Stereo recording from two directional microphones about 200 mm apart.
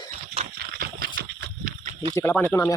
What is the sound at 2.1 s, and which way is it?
Speech, 10° left (ahead or behind).